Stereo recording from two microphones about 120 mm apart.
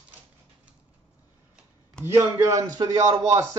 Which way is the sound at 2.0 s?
25° right (ahead or behind).